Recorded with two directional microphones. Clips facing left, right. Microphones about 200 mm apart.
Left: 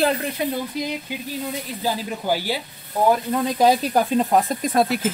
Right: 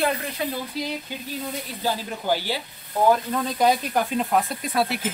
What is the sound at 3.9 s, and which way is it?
Speech, 40° left (ahead or behind).